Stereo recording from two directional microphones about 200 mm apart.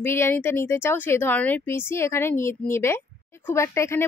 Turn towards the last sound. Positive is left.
turn(degrees=15)  # may be behind; listen again after turning